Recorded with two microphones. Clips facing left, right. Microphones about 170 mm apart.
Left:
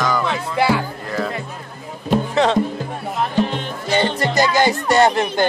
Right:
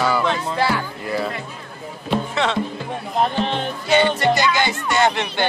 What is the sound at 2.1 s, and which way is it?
Speech, 40° left (ahead or behind).